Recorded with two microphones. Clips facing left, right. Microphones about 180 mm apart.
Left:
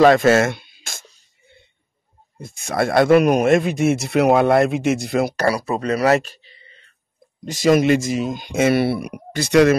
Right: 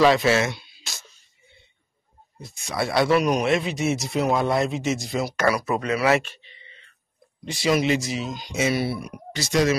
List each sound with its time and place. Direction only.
0.0 s speech: 50° left (ahead or behind)
2.4 s speech: 50° left (ahead or behind)
5.3 s speech: 35° left (ahead or behind); by 9.8 s 60° left (ahead or behind)